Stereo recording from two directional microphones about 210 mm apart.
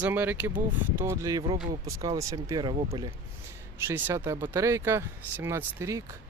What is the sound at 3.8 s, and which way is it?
Speech, 10° right (ahead or behind).